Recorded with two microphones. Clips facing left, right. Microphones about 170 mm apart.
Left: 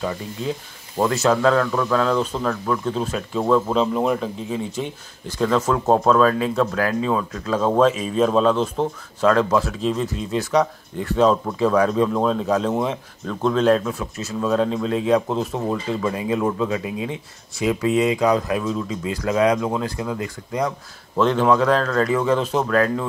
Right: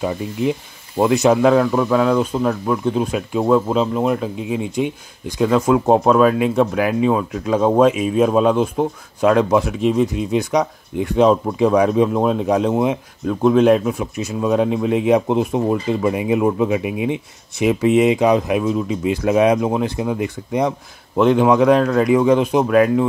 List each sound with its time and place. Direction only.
0.0 s speech: 15° right (ahead or behind)